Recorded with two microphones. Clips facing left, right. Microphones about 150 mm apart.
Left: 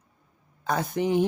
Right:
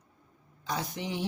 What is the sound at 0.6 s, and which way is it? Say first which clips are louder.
Speech: left 9 dB; 55° left (ahead or behind).